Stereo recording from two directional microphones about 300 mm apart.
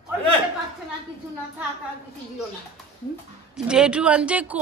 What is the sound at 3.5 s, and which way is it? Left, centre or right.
A woman's voice, centre.